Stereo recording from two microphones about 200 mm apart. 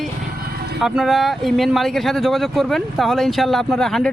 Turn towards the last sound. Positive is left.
turn(degrees=0)  # may be behind; listen again after turning